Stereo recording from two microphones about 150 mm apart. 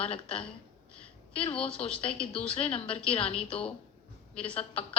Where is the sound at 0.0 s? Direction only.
35° left (ahead or behind).